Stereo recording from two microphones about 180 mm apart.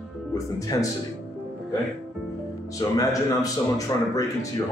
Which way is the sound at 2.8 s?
20° left (ahead or behind).